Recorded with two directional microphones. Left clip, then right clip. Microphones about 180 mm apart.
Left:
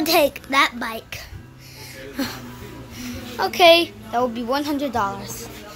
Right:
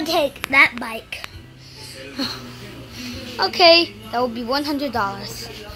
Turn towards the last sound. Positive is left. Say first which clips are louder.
# even
turn(degrees=0)  # may be behind; listen again after turning